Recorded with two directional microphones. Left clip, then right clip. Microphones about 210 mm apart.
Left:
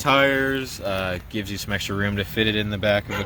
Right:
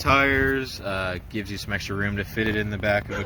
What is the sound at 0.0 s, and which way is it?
Speech, 50° left (ahead or behind).